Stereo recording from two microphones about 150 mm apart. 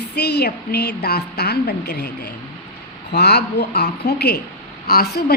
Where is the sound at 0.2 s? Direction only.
90° left.